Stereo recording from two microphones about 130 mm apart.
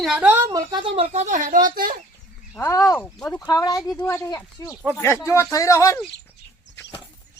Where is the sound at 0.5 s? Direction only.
40° right (ahead or behind); by 1.9 s 90° right.